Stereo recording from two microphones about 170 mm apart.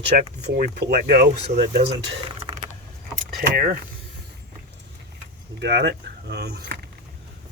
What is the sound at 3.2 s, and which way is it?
Speech, 60° right (ahead or behind).